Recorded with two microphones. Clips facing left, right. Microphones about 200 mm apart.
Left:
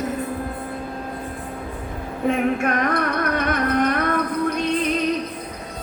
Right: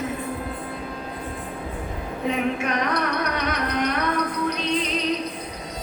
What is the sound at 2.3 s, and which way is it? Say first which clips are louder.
Music: left 4 dB; 50° left (ahead or behind).